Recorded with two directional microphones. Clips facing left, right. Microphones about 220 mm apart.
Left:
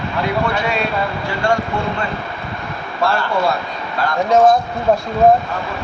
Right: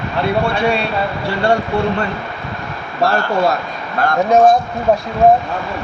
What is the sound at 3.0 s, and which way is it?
Speech, 40° right (ahead or behind).